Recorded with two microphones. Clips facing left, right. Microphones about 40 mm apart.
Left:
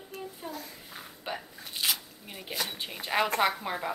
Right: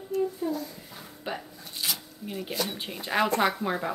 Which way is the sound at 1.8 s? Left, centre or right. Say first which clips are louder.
Left 1 dB; centre.